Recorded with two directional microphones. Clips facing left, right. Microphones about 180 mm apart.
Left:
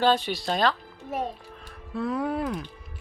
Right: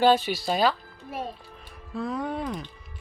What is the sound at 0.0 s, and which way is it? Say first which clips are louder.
Speech: right 2 dB; 5° right (ahead or behind).